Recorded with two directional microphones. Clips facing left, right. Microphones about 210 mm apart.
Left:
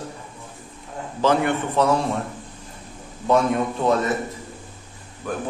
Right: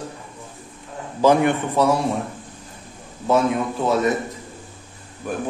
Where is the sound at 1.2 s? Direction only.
15° right (ahead or behind).